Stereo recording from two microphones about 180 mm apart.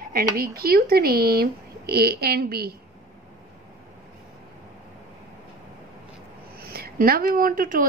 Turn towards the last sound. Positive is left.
turn(degrees=-50)  # may be behind; listen again after turning